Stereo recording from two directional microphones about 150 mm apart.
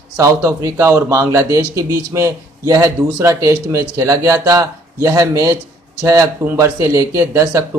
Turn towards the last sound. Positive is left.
turn(degrees=-20)  # may be behind; listen again after turning